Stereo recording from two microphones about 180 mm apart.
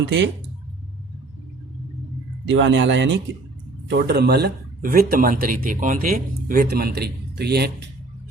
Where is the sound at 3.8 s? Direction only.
65° right (ahead or behind).